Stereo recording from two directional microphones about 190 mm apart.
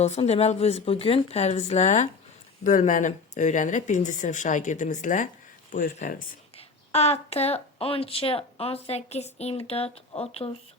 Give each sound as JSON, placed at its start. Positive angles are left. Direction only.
{"t": 0.0, "sound": "speech", "side_deg": 35}
{"t": 6.6, "sound": "speech", "side_deg": 35}